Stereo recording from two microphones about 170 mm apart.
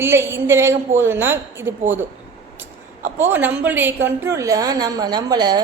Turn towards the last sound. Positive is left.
turn(degrees=-25)  # may be behind; listen again after turning